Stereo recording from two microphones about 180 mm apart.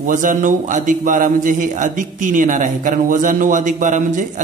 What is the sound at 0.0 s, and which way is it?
A man's voice, 45° right (ahead or behind).